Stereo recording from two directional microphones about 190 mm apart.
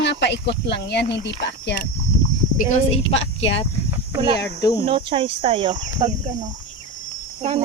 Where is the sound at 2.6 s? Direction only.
35° left (ahead or behind).